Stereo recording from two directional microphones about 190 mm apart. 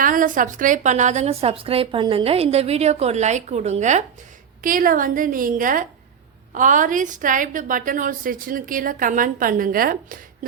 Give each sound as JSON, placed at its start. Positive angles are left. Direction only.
{"t": 0.0, "sound": "a woman's voice", "side_deg": -45}